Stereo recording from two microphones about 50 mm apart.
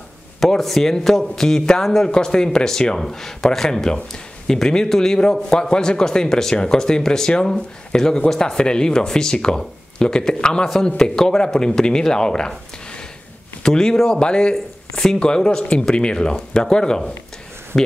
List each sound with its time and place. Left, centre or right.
0.4 s a man's voice: centre